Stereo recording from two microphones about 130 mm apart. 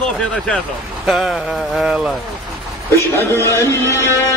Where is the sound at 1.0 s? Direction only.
Centre (ahead or behind).